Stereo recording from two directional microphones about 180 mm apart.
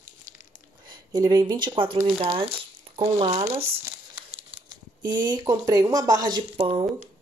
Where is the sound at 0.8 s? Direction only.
20° right (ahead or behind).